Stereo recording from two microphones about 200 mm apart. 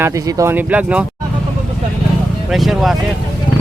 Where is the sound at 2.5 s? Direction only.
Centre (ahead or behind).